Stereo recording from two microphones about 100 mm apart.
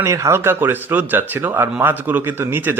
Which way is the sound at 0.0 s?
30° right (ahead or behind).